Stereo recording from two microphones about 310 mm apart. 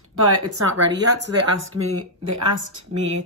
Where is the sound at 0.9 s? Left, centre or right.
Right.